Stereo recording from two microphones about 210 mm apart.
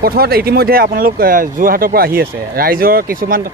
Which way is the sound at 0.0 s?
45° right (ahead or behind).